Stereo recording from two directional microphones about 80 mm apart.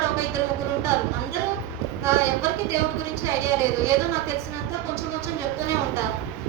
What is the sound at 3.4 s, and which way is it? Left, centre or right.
Speech, right.